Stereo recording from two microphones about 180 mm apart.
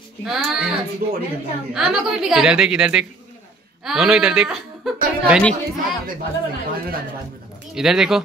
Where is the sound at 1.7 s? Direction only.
Centre (ahead or behind).